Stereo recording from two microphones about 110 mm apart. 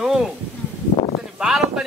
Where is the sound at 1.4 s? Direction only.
5° right (ahead or behind).